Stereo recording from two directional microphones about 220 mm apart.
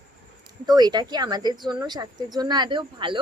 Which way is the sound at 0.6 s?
20° right (ahead or behind).